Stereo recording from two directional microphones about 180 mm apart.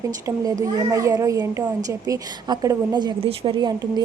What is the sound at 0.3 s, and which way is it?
A child's voice, 20° right (ahead or behind).